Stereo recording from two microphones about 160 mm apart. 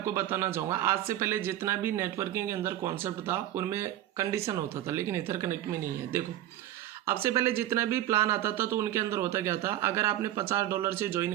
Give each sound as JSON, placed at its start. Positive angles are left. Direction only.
{"t": 0.0, "sound": "speech", "side_deg": -15}